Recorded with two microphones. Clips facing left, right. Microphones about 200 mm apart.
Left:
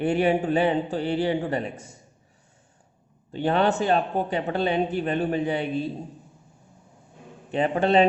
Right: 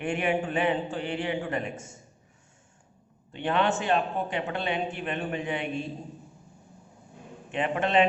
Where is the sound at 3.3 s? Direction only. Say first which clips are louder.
Left 4 dB; 40° left (ahead or behind).